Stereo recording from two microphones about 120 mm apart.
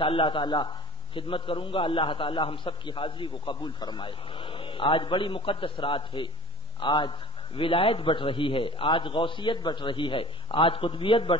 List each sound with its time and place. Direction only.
0.0 s a man's voice: 50° left (ahead or behind)